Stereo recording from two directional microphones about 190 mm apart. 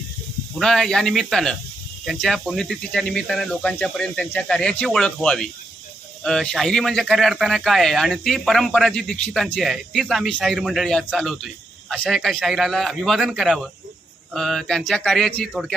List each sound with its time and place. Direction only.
0.6 s speech: centre (ahead or behind)